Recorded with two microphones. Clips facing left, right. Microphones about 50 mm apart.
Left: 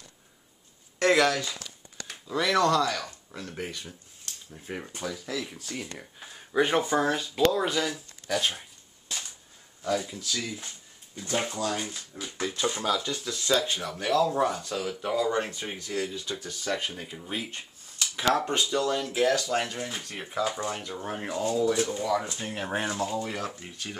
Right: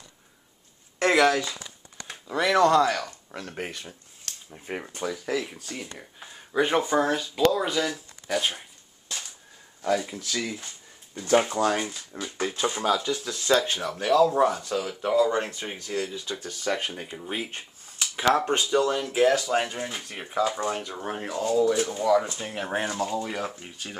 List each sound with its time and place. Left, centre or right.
0.9 s a sound: centre
2.3 s speech: centre
2.9 s speech: right
4.5 s speech: right
5.6 s speech: centre
8.3 s speech: centre
10.1 s speech: right
12.5 s speech: right
13.4 s speech: right
13.7 s speech: centre
17.2 s a sound: right
18.3 s speech: right
21.2 s speech: centre
21.7 s speech: centre